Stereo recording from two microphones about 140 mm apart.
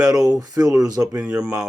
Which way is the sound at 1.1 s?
5° right (ahead or behind).